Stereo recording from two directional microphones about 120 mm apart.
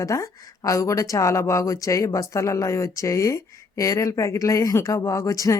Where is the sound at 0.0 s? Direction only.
25° left (ahead or behind).